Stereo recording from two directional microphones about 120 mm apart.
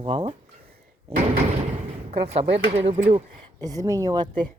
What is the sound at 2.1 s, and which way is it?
Speech, 60° right (ahead or behind).